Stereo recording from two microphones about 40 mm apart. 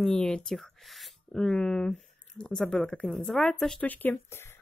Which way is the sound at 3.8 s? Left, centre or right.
Left.